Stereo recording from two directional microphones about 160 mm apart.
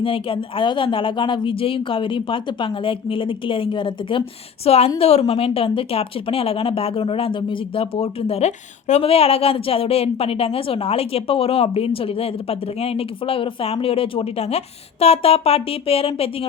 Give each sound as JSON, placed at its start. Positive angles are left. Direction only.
{"t": 0.0, "sound": "speech", "side_deg": 35}